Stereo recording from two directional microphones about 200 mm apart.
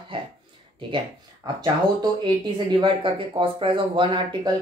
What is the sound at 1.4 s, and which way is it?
Speech, 20° right (ahead or behind).